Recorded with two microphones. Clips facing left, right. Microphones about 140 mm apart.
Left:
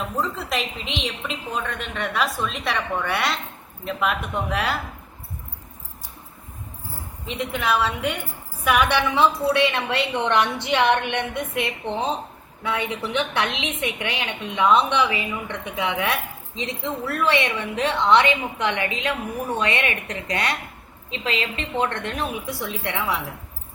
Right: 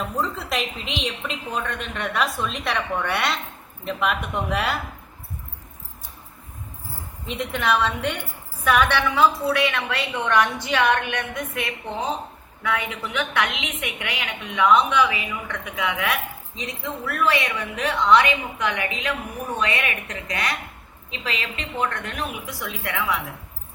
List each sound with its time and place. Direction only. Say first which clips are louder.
0.2 s a woman's voice: left 1 dB; centre (ahead or behind)
7.3 s a woman's voice: right 1 dB; centre (ahead or behind); by 23.2 s 30° left (ahead or behind)